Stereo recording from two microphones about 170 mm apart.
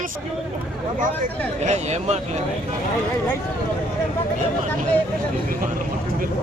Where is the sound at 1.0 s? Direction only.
45° right (ahead or behind).